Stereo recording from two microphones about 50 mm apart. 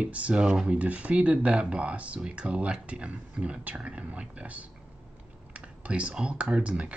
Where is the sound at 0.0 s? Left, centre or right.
Right.